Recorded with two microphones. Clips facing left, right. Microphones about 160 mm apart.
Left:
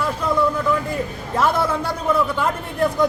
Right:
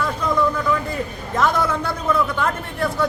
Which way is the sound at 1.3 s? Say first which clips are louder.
Even; 10° left (ahead or behind).